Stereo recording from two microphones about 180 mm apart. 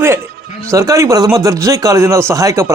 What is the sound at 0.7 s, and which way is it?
Speech, 15° right (ahead or behind).